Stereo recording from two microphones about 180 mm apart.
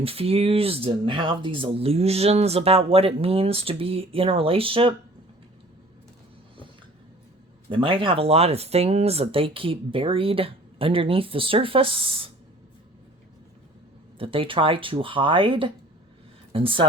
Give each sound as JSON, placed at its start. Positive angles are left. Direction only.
{"t": 0.0, "sound": "speech", "side_deg": -35}
{"t": 7.7, "sound": "speech", "side_deg": -30}
{"t": 14.2, "sound": "speech", "side_deg": -30}